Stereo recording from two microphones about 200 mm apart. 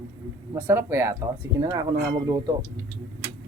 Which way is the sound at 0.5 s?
10° right (ahead or behind).